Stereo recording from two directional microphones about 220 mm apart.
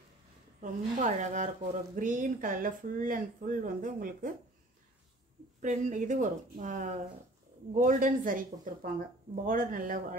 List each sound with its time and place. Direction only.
0.6 s speech: 35° right (ahead or behind)
5.6 s speech: 35° right (ahead or behind)